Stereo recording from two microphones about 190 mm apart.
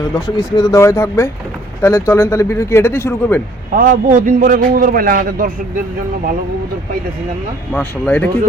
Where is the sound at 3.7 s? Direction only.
45° right (ahead or behind).